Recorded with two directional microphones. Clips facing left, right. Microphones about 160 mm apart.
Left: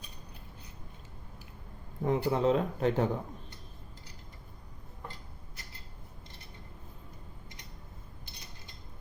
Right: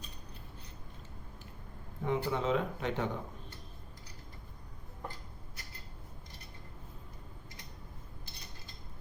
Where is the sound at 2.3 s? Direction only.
35° left (ahead or behind).